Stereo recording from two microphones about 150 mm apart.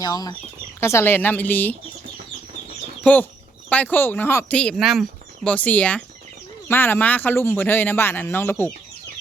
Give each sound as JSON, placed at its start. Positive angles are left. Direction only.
{"t": 0.0, "sound": "speech", "side_deg": 25}
{"t": 3.0, "sound": "speech", "side_deg": 10}